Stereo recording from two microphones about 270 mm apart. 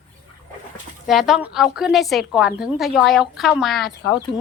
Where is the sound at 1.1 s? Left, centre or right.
Centre.